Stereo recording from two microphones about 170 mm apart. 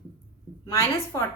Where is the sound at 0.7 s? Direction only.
15° left (ahead or behind).